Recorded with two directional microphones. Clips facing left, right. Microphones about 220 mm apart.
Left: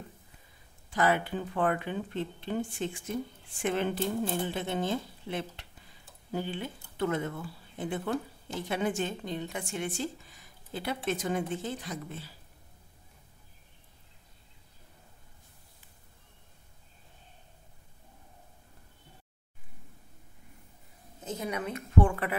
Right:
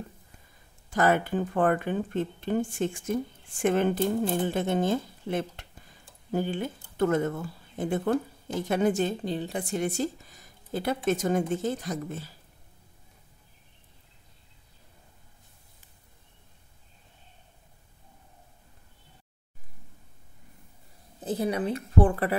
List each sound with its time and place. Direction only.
0.8 s speech: 45° right (ahead or behind)
21.2 s a woman's voice: 35° right (ahead or behind)